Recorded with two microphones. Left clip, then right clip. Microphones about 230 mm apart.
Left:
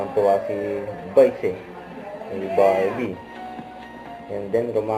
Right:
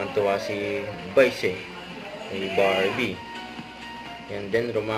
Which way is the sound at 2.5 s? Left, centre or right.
Centre.